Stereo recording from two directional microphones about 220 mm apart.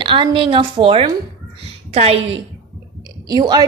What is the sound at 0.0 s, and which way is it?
A woman's voice, 25° right (ahead or behind).